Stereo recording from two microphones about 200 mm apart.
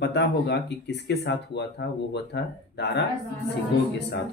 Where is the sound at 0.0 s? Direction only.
60° left (ahead or behind).